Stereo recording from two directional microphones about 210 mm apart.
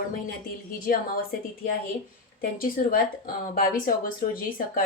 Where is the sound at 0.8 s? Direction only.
45° left (ahead or behind).